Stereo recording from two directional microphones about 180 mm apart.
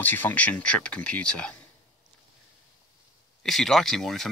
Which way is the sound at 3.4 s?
Centre (ahead or behind).